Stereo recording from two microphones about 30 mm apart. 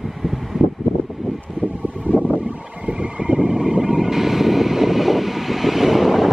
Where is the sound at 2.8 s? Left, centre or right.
Right.